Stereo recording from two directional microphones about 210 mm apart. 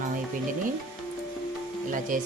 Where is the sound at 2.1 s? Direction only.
40° right (ahead or behind).